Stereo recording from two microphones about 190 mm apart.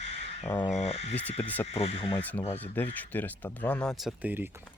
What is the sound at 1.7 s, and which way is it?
Speech, 30° left (ahead or behind).